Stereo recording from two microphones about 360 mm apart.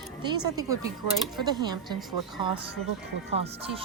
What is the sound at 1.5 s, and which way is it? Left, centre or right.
Speech, centre.